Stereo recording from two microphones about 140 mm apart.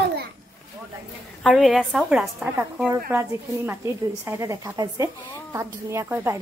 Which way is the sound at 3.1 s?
15° right (ahead or behind).